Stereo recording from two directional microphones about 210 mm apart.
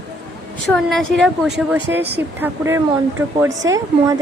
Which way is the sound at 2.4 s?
10° right (ahead or behind).